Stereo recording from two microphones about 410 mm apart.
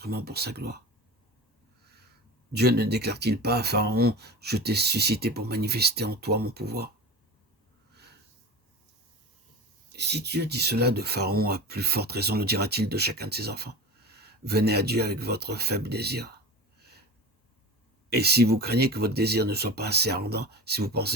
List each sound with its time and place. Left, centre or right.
0.0 s speech: right
1.8 s a sound: right
2.5 s speech: right
9.9 s speech: right
18.1 s speech: right